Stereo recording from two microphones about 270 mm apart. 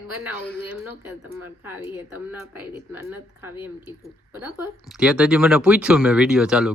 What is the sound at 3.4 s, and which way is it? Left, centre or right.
Speech, centre.